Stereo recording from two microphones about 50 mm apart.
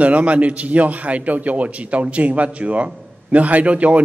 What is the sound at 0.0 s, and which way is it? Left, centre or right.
A man's voice, right.